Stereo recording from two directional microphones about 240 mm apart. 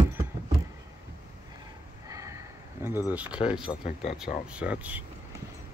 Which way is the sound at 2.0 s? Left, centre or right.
Centre.